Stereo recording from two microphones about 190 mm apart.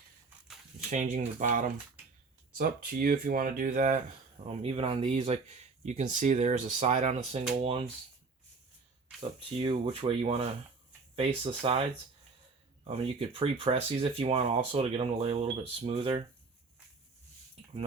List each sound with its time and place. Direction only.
0.4 s a sound: centre (ahead or behind)
0.9 s speech: 40° right (ahead or behind)
4.4 s speech: 30° right (ahead or behind)
9.6 s speech: 30° right (ahead or behind)